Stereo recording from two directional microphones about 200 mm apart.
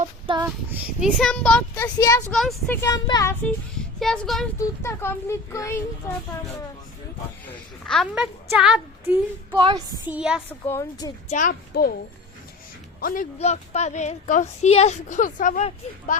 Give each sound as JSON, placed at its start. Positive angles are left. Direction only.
{"t": 0.0, "sound": "a sound", "side_deg": -25}
{"t": 0.4, "sound": "speech", "side_deg": -10}
{"t": 1.2, "sound": "child singing", "side_deg": 5}
{"t": 2.3, "sound": "a woman's voice", "side_deg": 0}
{"t": 2.8, "sound": "child singing", "side_deg": 15}
{"t": 4.0, "sound": "a woman's voice", "side_deg": 5}
{"t": 4.6, "sound": "child singing", "side_deg": 15}
{"t": 7.9, "sound": "a woman's voice", "side_deg": 0}
{"t": 9.6, "sound": "female singing", "side_deg": -20}
{"t": 10.1, "sound": "a woman's voice", "side_deg": -5}
{"t": 10.7, "sound": "child singing", "side_deg": 15}
{"t": 11.3, "sound": "a child's voice", "side_deg": 40}
{"t": 13.0, "sound": "speech", "side_deg": 45}
{"t": 13.4, "sound": "a woman's voice", "side_deg": 35}